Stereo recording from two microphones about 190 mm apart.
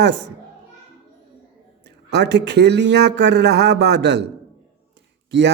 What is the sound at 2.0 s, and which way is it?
Speech, 60° right (ahead or behind).